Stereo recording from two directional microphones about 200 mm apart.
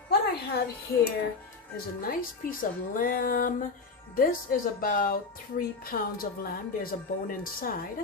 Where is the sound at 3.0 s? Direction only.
45° left (ahead or behind).